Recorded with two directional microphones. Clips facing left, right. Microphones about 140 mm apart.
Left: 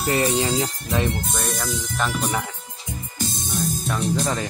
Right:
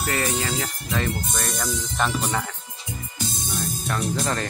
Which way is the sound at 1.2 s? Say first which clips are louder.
Left 1 dB; centre (ahead or behind).